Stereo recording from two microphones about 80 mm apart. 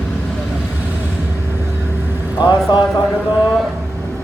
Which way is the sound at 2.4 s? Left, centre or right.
Left.